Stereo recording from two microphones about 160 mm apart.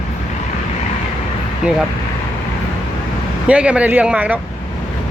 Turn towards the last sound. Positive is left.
turn(degrees=-10)  # may be behind; listen again after turning